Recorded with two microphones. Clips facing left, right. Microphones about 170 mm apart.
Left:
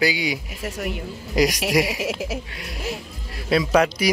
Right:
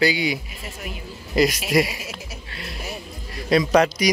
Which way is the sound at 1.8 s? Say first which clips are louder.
Left 9 dB; 90° left.